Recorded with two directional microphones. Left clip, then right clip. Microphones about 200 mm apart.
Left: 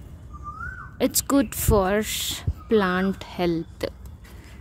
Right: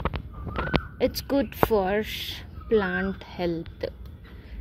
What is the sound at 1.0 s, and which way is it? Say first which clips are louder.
A woman's voice: left 5 dB; 35° left (ahead or behind).